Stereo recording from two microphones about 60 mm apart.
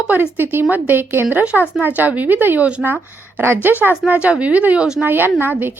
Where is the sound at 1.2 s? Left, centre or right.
Right.